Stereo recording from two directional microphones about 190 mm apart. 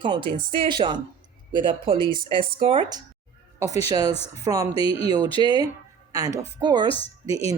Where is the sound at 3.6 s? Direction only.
35° left (ahead or behind).